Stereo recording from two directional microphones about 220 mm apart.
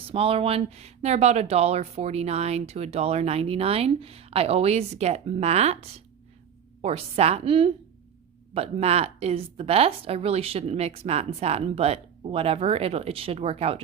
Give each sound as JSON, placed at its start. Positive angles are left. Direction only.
{"t": 0.1, "sound": "speech", "side_deg": -25}